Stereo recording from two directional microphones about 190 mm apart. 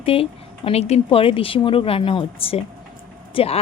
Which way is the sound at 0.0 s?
30° left (ahead or behind).